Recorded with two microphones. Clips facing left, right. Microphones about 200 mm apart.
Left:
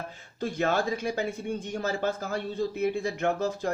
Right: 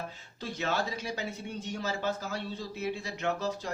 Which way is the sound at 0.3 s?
50° left (ahead or behind).